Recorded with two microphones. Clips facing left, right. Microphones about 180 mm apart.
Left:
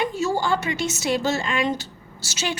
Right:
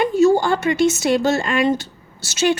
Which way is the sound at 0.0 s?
50° right (ahead or behind).